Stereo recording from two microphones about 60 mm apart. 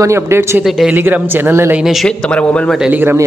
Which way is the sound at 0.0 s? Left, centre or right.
Right.